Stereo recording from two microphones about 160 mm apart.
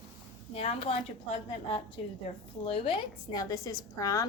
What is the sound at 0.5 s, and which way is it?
A woman's voice, 35° left (ahead or behind).